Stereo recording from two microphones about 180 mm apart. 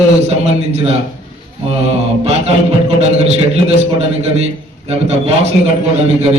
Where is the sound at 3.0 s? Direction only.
35° right (ahead or behind).